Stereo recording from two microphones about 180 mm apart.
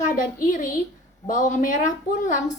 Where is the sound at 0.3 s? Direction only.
50° left (ahead or behind).